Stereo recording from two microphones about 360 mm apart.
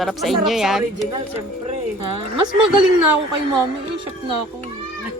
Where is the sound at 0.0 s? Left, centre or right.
Centre.